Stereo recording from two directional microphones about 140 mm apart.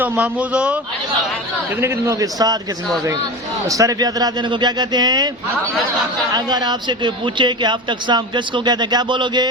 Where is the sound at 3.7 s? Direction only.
25° right (ahead or behind).